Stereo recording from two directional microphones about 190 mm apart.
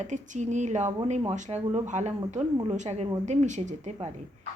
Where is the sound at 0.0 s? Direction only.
40° right (ahead or behind).